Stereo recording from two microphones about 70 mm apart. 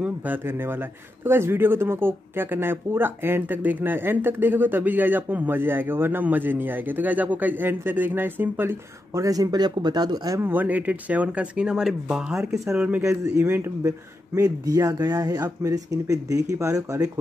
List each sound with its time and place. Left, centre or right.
0.0 s a man's voice: right
9.1 s speech: right
10.4 s speech: right; by 12.5 s centre
12.7 s a man's voice: centre
13.0 s a man's voice: right
14.4 s speech: right